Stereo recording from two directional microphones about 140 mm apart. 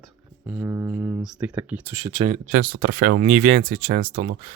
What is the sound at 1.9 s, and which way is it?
Speech, 25° right (ahead or behind).